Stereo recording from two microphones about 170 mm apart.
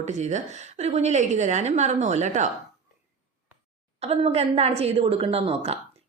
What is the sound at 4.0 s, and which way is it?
A woman's voice, 40° right (ahead or behind).